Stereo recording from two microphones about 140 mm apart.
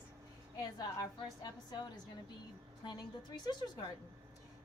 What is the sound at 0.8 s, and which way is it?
A woman's voice, 30° left (ahead or behind).